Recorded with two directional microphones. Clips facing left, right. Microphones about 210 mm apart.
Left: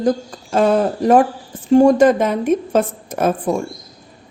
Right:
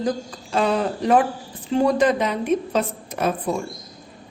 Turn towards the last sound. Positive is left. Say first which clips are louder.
# left 5 dB
turn(degrees=45)  # may be behind; listen again after turning